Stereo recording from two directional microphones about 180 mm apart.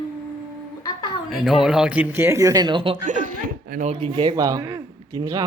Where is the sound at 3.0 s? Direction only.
45° right (ahead or behind).